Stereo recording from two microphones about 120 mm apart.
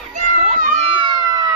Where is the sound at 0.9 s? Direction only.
40° right (ahead or behind).